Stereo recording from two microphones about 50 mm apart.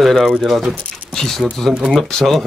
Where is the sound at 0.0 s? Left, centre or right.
Centre.